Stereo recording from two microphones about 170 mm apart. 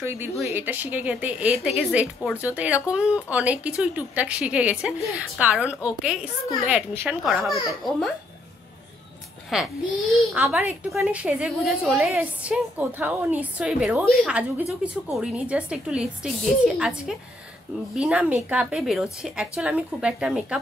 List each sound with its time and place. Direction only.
0.0 s a woman's voice: 15° right (ahead or behind); by 8.1 s centre (ahead or behind)
9.5 s a woman's voice: centre (ahead or behind)